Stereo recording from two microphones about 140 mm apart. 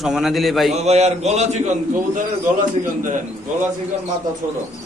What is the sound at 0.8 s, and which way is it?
Speech, 50° right (ahead or behind).